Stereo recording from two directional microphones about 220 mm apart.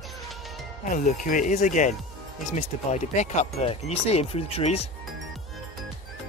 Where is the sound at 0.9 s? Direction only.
35° left (ahead or behind).